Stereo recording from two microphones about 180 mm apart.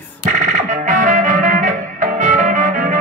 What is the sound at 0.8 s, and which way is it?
Music, 45° right (ahead or behind).